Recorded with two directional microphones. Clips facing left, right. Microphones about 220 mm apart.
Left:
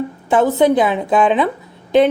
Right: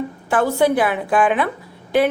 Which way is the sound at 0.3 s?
20° left (ahead or behind).